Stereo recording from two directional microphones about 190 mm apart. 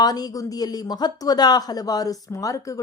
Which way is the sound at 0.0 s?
20° left (ahead or behind).